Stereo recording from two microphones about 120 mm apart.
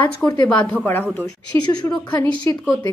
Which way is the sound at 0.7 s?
15° left (ahead or behind).